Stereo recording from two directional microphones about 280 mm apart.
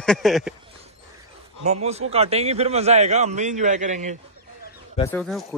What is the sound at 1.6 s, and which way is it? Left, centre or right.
A man's voice, right.